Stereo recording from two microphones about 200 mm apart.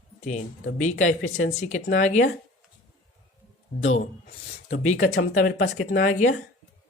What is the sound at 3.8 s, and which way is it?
Speech, 30° left (ahead or behind).